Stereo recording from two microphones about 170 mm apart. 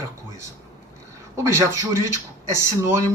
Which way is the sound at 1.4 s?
15° right (ahead or behind).